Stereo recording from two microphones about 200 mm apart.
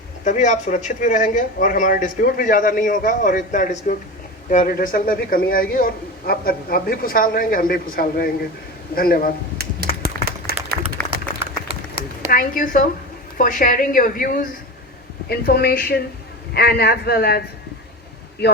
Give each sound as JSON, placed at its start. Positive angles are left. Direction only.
{"t": 0.3, "sound": "a man's voice", "side_deg": 40}
{"t": 9.6, "sound": "a sound", "side_deg": -50}
{"t": 12.3, "sound": "a man's voice", "side_deg": 45}